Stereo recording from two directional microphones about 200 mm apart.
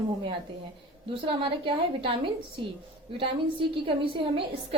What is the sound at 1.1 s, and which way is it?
A woman's voice, 25° right (ahead or behind).